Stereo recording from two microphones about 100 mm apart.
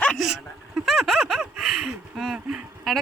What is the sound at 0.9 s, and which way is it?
Speech, centre (ahead or behind).